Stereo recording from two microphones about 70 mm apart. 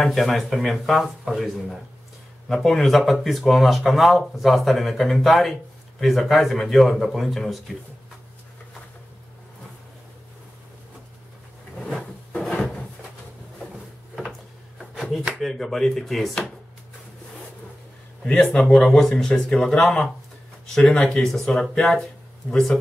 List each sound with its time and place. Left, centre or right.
0.1 s speech: centre
12.3 s drawer open or close: centre
14.8 s a sound: centre
15.4 s speech: centre
18.2 s speech: centre